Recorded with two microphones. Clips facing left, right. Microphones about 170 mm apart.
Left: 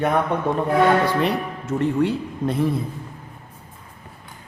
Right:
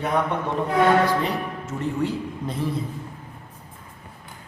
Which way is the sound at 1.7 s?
65° left (ahead or behind).